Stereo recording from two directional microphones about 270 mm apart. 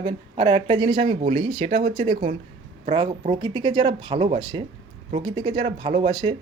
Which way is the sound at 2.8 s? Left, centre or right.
Centre.